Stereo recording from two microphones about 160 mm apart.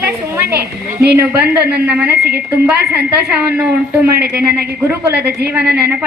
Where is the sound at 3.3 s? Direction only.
10° right (ahead or behind).